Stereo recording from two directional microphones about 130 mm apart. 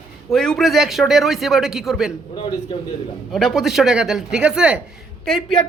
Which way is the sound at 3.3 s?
Centre (ahead or behind).